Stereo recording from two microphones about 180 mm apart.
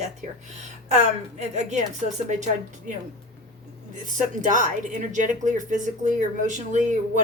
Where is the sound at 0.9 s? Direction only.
40° right (ahead or behind).